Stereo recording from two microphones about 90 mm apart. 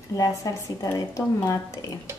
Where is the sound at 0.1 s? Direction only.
35° left (ahead or behind).